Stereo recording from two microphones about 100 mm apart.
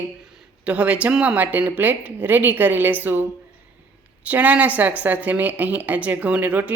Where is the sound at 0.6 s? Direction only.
15° right (ahead or behind).